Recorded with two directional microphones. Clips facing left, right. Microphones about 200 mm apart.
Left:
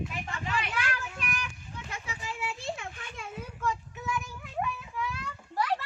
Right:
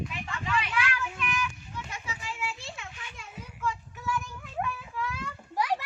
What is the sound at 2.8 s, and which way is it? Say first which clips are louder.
Children playing: left 3 dB; 50° left (ahead or behind).